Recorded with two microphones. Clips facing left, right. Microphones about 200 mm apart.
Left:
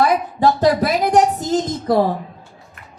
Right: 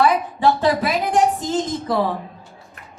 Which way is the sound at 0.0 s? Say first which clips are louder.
Left 1 dB; 40° left (ahead or behind).